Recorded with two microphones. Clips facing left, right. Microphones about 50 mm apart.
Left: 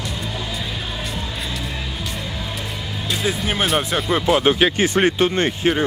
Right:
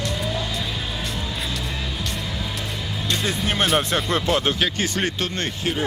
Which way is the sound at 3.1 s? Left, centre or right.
Centre.